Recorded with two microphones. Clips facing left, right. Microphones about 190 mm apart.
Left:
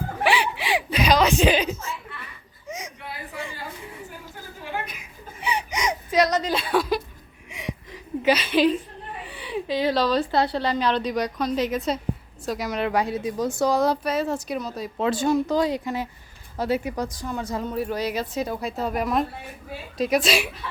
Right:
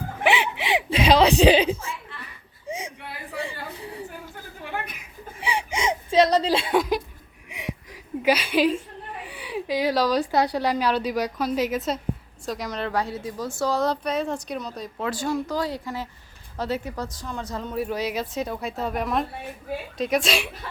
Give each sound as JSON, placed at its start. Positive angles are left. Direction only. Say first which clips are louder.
{"t": 0.2, "sound": "chuckle", "louder": "even", "side_deg": -20}
{"t": 5.4, "sound": "chuckle", "louder": "even", "side_deg": -30}
{"t": 8.2, "sound": "a woman's voice", "louder": "left 1 dB", "side_deg": -10}
{"t": 14.9, "sound": "a woman's voice", "louder": "left 5 dB", "side_deg": 25}
{"t": 17.7, "sound": "speech", "louder": "right 1 dB", "side_deg": 0}